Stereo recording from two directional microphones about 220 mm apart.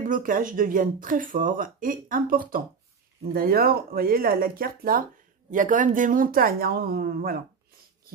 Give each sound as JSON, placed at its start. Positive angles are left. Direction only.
{"t": 0.0, "sound": "speech", "side_deg": -40}